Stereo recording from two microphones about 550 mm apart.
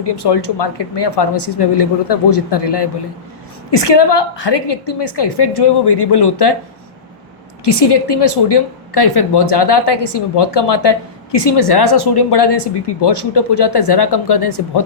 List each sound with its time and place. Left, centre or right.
0.0 s a woman's voice: left
7.6 s a woman's voice: left